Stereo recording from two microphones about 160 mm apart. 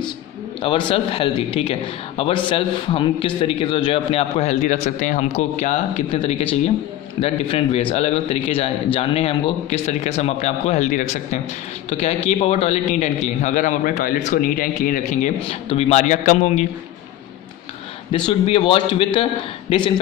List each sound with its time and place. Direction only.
0.6 s a man's voice: 30° left (ahead or behind); by 11.1 s 50° left (ahead or behind)
12.3 s a man's voice: 40° left (ahead or behind)
18.1 s a man's voice: 35° left (ahead or behind)